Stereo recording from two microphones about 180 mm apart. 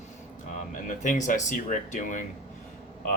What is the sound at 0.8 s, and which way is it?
Speech, 45° left (ahead or behind).